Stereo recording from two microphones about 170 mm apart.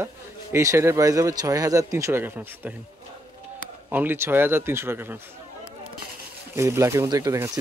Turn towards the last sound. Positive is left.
turn(degrees=-20)  # may be behind; listen again after turning